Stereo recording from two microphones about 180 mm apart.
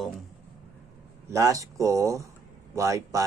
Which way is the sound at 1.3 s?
15° right (ahead or behind).